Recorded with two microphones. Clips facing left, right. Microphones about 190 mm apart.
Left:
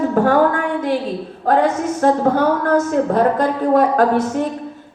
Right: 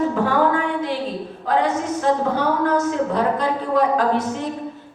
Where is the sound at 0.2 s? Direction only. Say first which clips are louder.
Left 6 dB; 50° left (ahead or behind).